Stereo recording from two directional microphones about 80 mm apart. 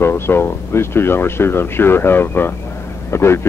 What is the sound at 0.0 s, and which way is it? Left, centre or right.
Speech, left.